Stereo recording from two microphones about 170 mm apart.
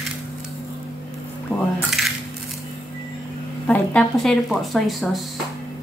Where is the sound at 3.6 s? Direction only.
5° left (ahead or behind).